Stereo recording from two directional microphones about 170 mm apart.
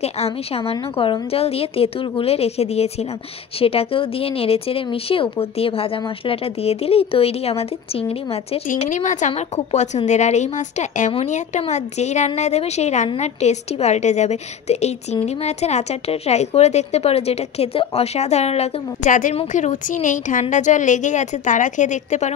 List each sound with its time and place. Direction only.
0.0 s a woman's voice: 35° left (ahead or behind)
8.6 s a woman's voice: 50° left (ahead or behind)